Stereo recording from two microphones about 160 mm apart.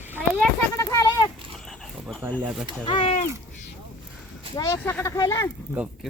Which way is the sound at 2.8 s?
30° left (ahead or behind).